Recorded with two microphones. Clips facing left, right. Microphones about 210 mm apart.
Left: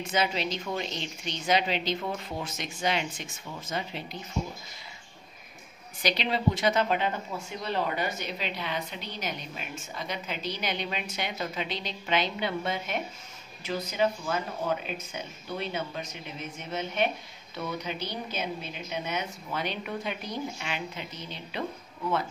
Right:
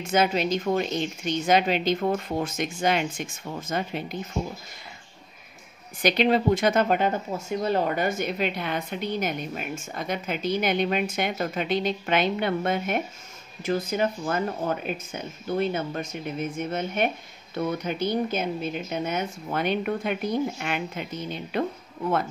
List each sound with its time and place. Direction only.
0.0 s speech: 45° right (ahead or behind)
6.0 s speech: 50° right (ahead or behind)